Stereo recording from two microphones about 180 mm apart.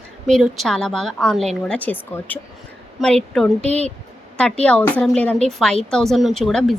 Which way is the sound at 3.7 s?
35° right (ahead or behind).